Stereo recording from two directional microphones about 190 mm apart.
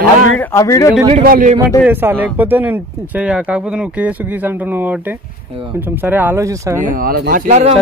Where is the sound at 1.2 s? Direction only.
50° right (ahead or behind).